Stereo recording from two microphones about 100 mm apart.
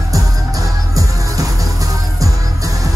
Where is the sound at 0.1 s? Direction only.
35° right (ahead or behind).